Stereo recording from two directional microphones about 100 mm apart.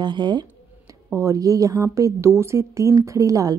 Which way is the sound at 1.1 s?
35° right (ahead or behind).